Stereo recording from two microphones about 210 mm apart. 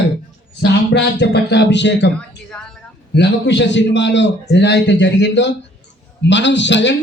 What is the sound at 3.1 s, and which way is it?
A man's voice, 55° left (ahead or behind).